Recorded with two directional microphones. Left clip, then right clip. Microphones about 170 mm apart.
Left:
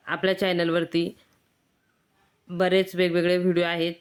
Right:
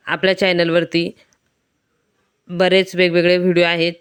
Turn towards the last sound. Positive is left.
turn(degrees=-35)  # may be behind; listen again after turning